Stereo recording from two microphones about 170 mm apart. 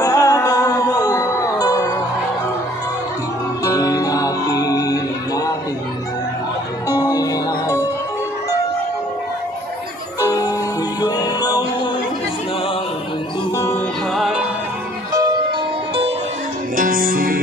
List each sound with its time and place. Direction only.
0.0 s music: 20° left (ahead or behind)
3.6 s music: 20° left (ahead or behind)
7.0 s music: 20° left (ahead or behind)
11.0 s music: 20° left (ahead or behind)
14.1 s music: centre (ahead or behind)
16.7 s music: 55° right (ahead or behind)